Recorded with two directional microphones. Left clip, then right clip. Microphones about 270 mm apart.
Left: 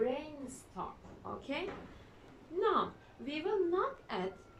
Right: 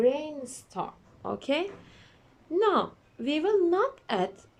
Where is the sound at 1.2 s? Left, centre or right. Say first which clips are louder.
Right 10 dB; right.